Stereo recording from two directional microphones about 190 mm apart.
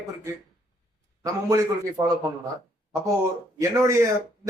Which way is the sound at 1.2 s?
15° right (ahead or behind).